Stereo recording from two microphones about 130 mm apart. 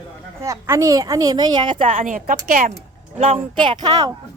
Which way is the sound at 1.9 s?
90° right.